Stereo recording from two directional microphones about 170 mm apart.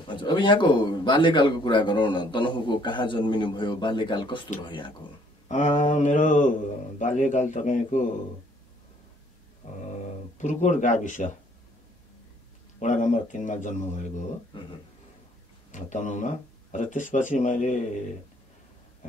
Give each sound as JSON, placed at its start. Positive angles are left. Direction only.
{"t": 0.0, "sound": "a man's voice", "side_deg": 30}
{"t": 5.5, "sound": "speech", "side_deg": 45}
{"t": 9.6, "sound": "a sound", "side_deg": 50}
{"t": 10.3, "sound": "speech", "side_deg": 45}
{"t": 12.7, "sound": "speech", "side_deg": 45}
{"t": 15.7, "sound": "speech", "side_deg": 45}